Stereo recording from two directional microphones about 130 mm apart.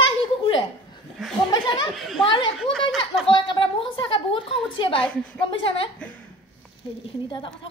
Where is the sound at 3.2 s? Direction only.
40° left (ahead or behind).